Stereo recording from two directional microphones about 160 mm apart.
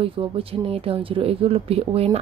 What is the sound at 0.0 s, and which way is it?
Speech, 35° right (ahead or behind).